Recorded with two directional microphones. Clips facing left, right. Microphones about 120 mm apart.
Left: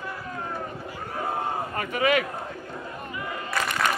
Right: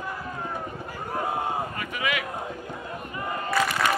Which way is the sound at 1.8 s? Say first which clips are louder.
Left 6 dB; 40° left (ahead or behind).